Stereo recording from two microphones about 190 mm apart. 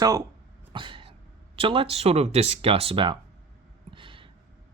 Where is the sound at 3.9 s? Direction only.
25° right (ahead or behind).